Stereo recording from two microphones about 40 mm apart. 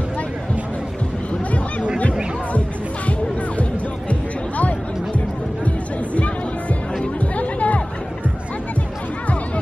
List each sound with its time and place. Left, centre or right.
4.1 s music: left
7.3 s music: left